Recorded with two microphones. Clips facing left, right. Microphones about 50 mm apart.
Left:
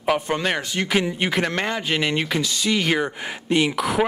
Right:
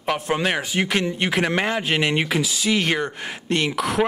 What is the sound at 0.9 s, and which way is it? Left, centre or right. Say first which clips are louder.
Speech: left 1 dB; centre.